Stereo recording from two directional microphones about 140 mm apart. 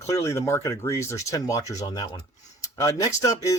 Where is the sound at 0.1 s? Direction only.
20° left (ahead or behind).